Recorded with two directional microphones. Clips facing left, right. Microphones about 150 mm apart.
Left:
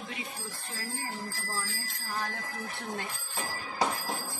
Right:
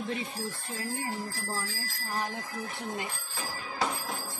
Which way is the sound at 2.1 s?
15° right (ahead or behind).